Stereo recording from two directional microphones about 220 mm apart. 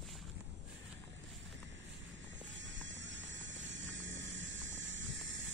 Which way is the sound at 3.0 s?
55° right (ahead or behind).